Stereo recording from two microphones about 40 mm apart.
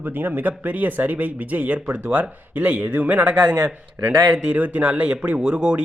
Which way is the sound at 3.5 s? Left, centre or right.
Right.